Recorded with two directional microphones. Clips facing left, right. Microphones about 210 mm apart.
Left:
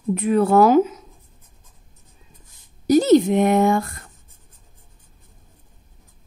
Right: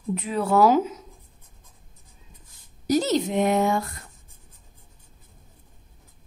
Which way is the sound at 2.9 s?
55° left (ahead or behind).